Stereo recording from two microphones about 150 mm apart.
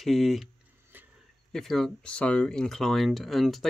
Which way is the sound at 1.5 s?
Centre (ahead or behind).